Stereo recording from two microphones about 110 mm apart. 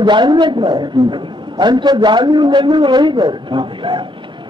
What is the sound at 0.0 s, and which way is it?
A man's voice, 45° right (ahead or behind).